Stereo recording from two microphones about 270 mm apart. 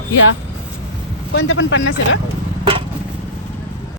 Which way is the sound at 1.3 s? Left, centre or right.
Left.